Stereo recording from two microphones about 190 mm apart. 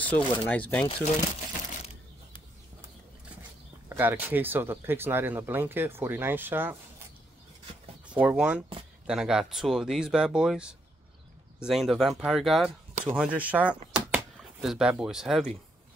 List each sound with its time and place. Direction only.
0.0 s speech: 10° left (ahead or behind)
3.9 s speech: 10° right (ahead or behind)
8.1 s speech: 5° right (ahead or behind)
13.9 s a sound: 5° right (ahead or behind)